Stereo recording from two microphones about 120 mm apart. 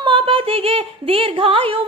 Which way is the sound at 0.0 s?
45° right (ahead or behind).